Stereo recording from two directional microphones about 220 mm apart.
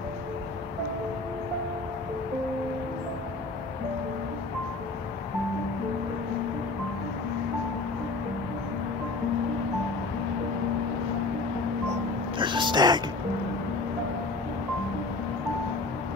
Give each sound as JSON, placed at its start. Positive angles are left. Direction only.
{"t": 12.4, "sound": "music", "side_deg": -20}